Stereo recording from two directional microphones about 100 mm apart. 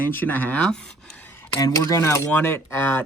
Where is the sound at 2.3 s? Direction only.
20° left (ahead or behind).